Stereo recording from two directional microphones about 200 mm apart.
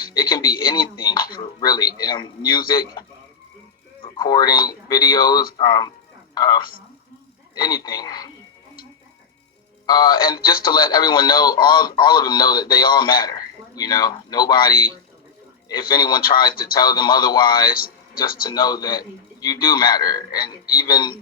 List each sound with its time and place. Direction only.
0.0 s speech: 20° left (ahead or behind)
4.0 s a woman's voice: 20° left (ahead or behind)
9.8 s speech: 20° left (ahead or behind)
16.0 s speech: 20° left (ahead or behind)
17.7 s a sound: 45° left (ahead or behind)
18.4 s speech: 20° left (ahead or behind)